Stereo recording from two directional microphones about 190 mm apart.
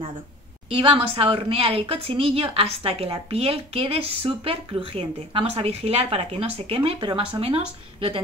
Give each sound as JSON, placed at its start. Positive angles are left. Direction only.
{"t": 0.7, "sound": "a woman's voice", "side_deg": -30}